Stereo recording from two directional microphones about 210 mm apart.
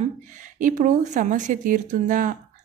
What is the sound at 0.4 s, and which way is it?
Speech, 40° right (ahead or behind).